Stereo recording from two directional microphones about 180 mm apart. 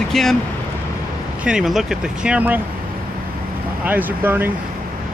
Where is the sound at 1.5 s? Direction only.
5° right (ahead or behind).